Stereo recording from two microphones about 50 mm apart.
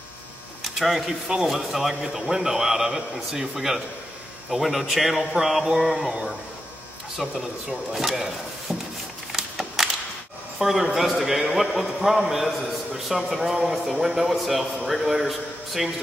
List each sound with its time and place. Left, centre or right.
0.7 s a man's voice: centre
7.2 s a man's voice: centre
10.6 s a man's voice: centre